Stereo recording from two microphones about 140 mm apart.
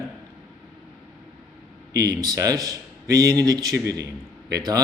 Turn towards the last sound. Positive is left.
turn(degrees=-25)  # may be behind; listen again after turning